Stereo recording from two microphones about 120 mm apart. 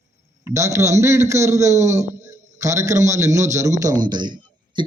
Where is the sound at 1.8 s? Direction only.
75° right (ahead or behind).